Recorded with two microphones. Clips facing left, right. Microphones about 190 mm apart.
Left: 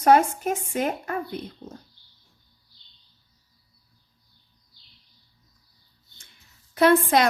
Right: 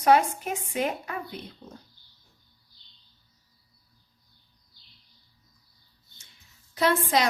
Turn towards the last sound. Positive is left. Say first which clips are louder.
# left 6 dB
turn(degrees=55)  # may be behind; listen again after turning